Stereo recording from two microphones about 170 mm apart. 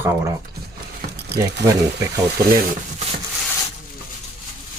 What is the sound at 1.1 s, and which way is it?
Keys jangling, 75° right (ahead or behind).